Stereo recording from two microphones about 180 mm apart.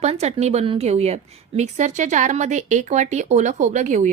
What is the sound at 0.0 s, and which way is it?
A woman's voice, 35° right (ahead or behind).